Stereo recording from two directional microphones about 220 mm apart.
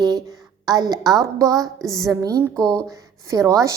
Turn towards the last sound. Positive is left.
turn(degrees=-15)  # may be behind; listen again after turning